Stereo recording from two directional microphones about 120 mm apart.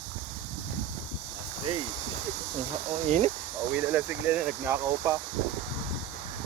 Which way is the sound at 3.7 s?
15° right (ahead or behind).